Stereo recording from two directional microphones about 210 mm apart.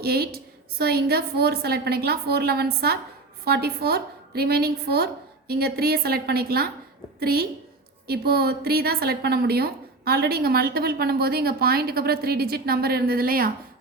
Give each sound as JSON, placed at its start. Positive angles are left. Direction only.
{"t": 0.0, "sound": "a woman's voice", "side_deg": -50}